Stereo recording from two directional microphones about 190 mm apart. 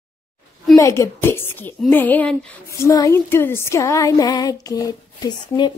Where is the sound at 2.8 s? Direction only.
15° left (ahead or behind).